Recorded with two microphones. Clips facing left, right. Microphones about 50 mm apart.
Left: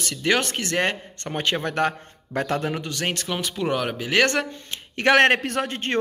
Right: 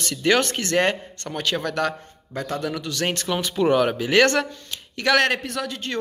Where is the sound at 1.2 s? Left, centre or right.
Left.